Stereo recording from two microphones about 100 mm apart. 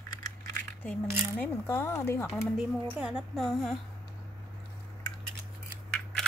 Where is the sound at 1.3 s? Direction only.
25° left (ahead or behind).